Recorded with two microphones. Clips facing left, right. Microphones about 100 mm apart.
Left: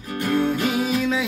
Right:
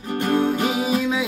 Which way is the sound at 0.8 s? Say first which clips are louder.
Right 1 dB; 15° right (ahead or behind).